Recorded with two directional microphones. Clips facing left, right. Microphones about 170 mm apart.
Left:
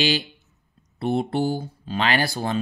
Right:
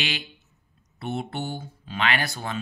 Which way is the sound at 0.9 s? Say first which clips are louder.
Left 8 dB; 35° left (ahead or behind).